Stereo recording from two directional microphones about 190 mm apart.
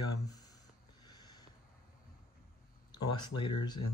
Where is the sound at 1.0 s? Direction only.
20° left (ahead or behind).